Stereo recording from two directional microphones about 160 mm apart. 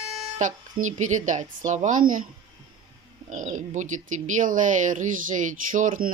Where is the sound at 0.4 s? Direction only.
50° right (ahead or behind).